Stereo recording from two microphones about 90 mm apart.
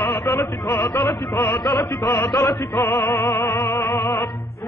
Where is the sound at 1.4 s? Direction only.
55° left (ahead or behind).